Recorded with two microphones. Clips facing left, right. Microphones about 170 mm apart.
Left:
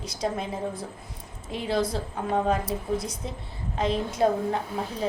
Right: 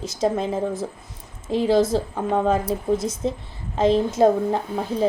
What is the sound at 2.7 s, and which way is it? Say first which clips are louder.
A woman's voice: right 6 dB; 30° right (ahead or behind).